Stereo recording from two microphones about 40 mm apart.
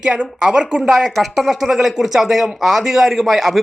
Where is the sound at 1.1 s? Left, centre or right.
Centre.